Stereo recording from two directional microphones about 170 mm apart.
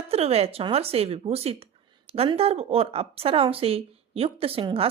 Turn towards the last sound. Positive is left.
turn(degrees=-35)  # may be behind; listen again after turning